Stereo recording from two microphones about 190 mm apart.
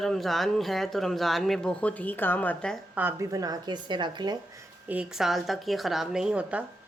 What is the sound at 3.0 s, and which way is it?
A woman's voice, 15° right (ahead or behind).